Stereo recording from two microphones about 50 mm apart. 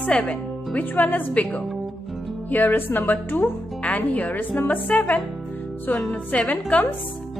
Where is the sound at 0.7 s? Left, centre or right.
Left.